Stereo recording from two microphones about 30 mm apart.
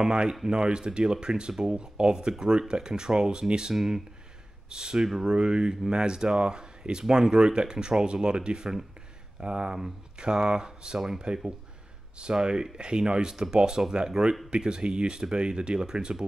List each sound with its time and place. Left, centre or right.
0.0 s speech: right
11.0 s speech: centre
12.2 s speech: right